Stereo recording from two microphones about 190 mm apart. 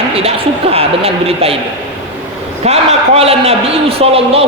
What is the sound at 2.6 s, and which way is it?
A man's voice, 35° right (ahead or behind).